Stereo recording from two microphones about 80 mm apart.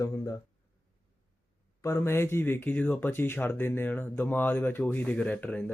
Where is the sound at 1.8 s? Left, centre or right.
Left.